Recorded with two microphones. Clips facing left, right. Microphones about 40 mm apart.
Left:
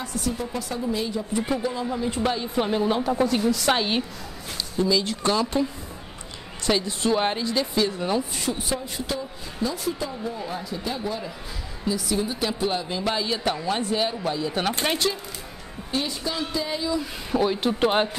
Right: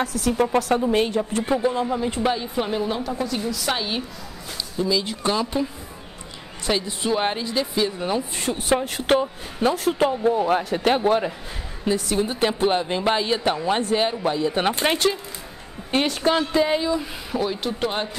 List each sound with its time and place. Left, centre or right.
0.0 s a man's voice: right
1.5 s speech: right
2.2 s a woman's voice: centre
4.7 s speech: centre
6.7 s speech: centre
8.5 s a man's voice: right
11.8 s a woman's voice: right
15.9 s a woman's voice: right
17.3 s a woman's voice: centre